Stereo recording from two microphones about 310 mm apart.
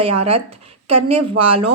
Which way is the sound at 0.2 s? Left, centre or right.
Centre.